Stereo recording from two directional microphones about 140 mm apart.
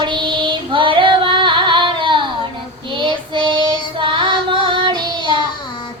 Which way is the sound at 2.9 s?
35° right (ahead or behind).